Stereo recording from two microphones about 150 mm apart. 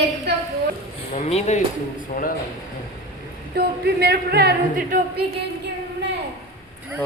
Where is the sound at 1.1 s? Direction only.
50° left (ahead or behind).